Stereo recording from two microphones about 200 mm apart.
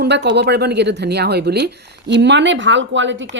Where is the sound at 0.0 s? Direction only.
55° right (ahead or behind).